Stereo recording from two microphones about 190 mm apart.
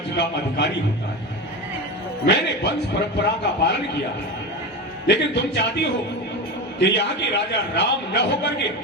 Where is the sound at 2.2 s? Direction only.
65° left (ahead or behind).